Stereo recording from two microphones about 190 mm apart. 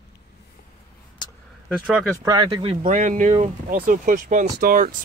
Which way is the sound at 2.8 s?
40° right (ahead or behind).